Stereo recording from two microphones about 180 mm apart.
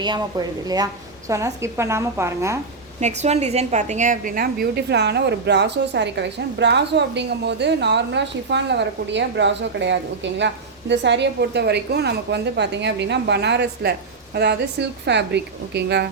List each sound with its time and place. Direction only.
0.0 s a woman's voice: 25° right (ahead or behind)
3.0 s a woman's voice: 40° right (ahead or behind); by 16.0 s 70° right (ahead or behind)